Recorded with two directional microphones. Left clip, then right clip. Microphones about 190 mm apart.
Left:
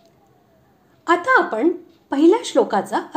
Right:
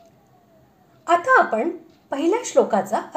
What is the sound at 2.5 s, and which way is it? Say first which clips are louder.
Speech: even; 30° left (ahead or behind).